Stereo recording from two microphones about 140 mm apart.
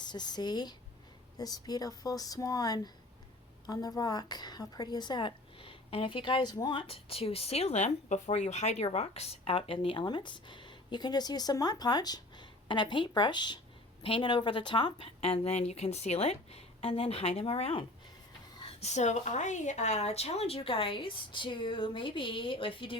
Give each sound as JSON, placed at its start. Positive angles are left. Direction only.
{"t": 0.0, "sound": "a woman's voice", "side_deg": 30}